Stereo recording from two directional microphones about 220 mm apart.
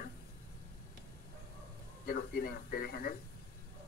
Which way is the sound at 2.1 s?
40° left (ahead or behind).